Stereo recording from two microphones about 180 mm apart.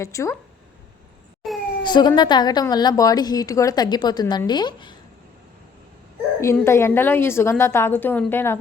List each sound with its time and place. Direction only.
0.0 s a woman's voice: 15° left (ahead or behind)
1.4 s a sound: centre (ahead or behind)
1.8 s a woman's voice: 25° left (ahead or behind)
6.4 s a woman's voice: 15° left (ahead or behind)